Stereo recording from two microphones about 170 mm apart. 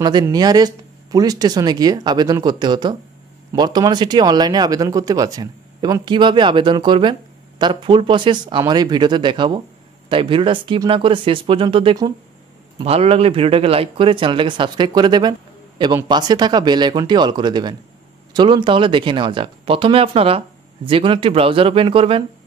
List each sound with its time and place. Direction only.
0.0 s speech: 25° right (ahead or behind)